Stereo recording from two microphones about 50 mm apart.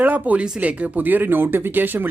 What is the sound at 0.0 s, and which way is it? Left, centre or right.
Speech, right.